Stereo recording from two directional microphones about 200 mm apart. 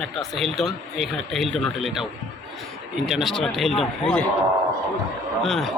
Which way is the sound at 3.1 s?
Centre (ahead or behind).